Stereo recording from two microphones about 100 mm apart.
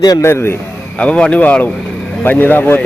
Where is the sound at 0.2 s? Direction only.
25° left (ahead or behind).